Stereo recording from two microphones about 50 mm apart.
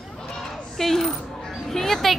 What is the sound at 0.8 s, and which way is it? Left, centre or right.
Coin, centre.